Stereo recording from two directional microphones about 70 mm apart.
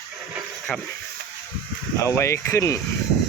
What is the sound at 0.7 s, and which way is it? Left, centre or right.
Speech, centre.